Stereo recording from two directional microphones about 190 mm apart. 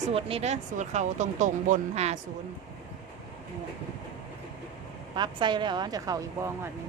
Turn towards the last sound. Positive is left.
turn(degrees=-15)  # may be behind; listen again after turning